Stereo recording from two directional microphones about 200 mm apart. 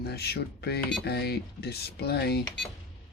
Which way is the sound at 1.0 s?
55° left (ahead or behind).